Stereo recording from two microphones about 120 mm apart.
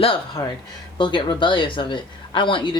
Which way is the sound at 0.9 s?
40° left (ahead or behind).